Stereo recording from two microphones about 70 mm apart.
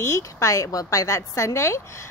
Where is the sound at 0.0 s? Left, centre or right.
Left.